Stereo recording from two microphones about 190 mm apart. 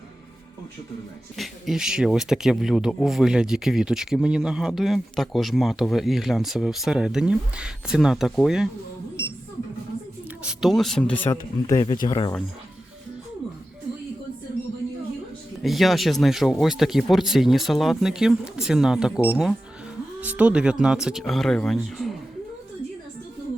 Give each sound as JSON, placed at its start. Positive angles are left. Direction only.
{"t": 1.4, "sound": "speech", "side_deg": 0}
{"t": 10.4, "sound": "speech", "side_deg": 0}
{"t": 15.6, "sound": "speech", "side_deg": 0}